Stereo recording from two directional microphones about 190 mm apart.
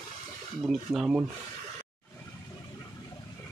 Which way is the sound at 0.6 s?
5° right (ahead or behind).